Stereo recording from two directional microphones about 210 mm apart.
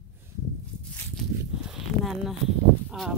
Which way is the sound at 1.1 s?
Centre (ahead or behind).